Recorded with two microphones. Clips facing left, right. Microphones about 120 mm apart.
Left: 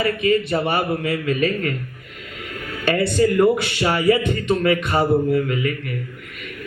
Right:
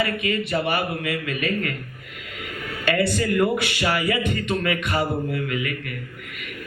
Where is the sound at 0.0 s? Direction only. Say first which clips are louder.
Left 5 dB; 35° left (ahead or behind).